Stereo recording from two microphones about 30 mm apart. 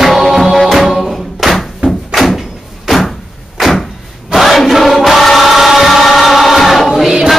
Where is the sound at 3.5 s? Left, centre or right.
Centre.